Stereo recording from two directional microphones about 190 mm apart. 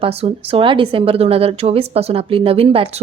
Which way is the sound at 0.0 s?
30° right (ahead or behind).